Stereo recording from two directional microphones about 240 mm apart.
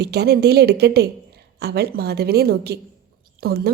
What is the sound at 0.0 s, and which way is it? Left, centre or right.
Speech, right.